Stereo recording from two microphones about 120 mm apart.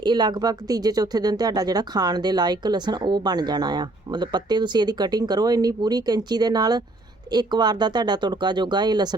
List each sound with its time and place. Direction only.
0.0 s speech: 35° right (ahead or behind)